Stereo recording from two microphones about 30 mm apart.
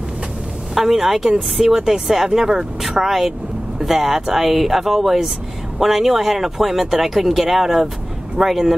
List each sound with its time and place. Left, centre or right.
0.7 s speech: centre